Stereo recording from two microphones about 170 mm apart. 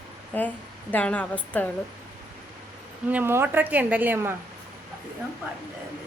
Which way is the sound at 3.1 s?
10° right (ahead or behind).